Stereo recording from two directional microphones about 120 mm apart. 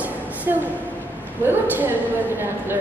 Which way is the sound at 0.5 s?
20° right (ahead or behind).